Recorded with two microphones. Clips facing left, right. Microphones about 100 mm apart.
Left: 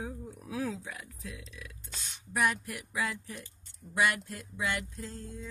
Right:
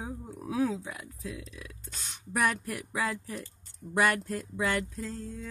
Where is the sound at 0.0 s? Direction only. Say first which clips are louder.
Right 2 dB; 30° right (ahead or behind).